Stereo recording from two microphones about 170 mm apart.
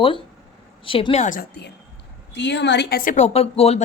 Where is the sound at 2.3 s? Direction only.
90° left; by 3.1 s 65° left (ahead or behind).